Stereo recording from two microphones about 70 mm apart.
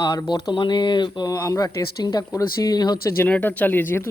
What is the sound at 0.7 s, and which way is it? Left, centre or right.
Speech, left.